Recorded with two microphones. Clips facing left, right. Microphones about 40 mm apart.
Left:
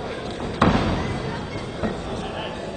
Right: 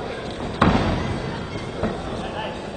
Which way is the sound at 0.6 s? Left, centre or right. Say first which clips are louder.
Right 1 dB; centre.